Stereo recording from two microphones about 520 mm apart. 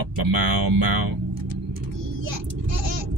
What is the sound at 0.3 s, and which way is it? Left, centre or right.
Speech, right.